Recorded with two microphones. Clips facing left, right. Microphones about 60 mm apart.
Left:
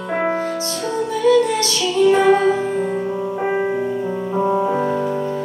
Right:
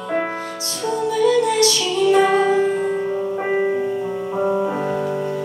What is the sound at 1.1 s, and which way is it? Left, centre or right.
Music, left.